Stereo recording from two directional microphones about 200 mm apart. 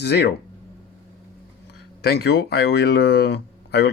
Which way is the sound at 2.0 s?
55° left (ahead or behind).